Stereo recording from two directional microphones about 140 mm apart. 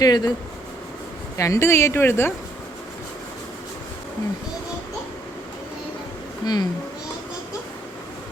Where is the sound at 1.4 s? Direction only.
20° left (ahead or behind).